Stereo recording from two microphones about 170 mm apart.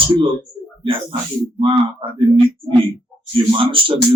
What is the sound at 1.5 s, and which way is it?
Speech, 30° right (ahead or behind).